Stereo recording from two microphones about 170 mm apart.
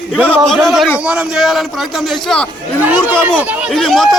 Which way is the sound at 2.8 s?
10° right (ahead or behind).